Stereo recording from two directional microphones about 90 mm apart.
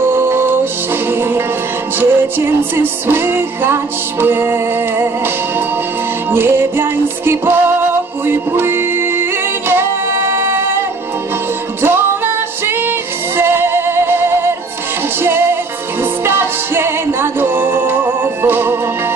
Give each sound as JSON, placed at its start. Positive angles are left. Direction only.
{"t": 0.0, "sound": "music", "side_deg": -25}
{"t": 6.3, "sound": "music", "side_deg": -25}
{"t": 13.4, "sound": "music", "side_deg": -25}
{"t": 16.0, "sound": "music", "side_deg": -25}